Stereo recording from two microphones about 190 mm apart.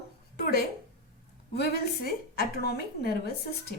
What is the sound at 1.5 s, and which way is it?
A woman's voice, 55° left (ahead or behind).